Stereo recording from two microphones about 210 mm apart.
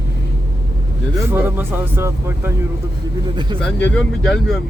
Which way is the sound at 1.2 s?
10° right (ahead or behind).